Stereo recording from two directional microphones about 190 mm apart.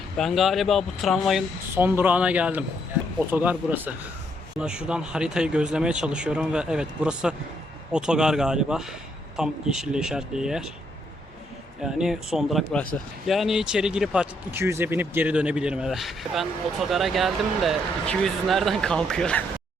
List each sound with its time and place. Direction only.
0.2 s speech: centre (ahead or behind)
1.7 s speech: 10° right (ahead or behind)
11.8 s speech: 5° right (ahead or behind)